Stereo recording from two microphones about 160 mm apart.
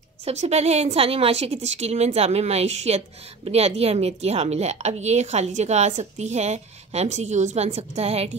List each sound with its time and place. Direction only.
0.2 s a woman's voice: 45° right (ahead or behind)